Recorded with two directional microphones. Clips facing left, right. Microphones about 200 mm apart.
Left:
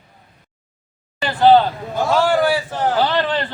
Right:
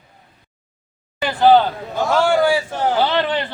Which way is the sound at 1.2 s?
10° right (ahead or behind).